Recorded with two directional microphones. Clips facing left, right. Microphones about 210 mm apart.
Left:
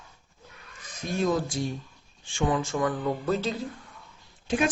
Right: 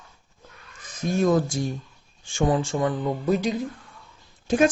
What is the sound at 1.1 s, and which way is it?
Speech, 45° right (ahead or behind).